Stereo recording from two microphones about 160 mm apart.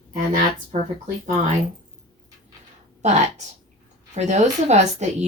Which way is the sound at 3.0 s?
45° right (ahead or behind).